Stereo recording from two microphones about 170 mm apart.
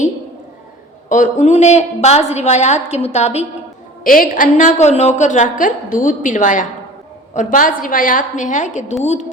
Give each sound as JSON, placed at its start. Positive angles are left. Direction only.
{"t": 1.1, "sound": "a woman's voice", "side_deg": 45}
{"t": 4.0, "sound": "a woman's voice", "side_deg": 55}